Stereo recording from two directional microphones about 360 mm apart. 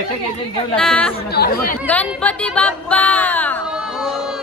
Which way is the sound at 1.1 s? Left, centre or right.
Left.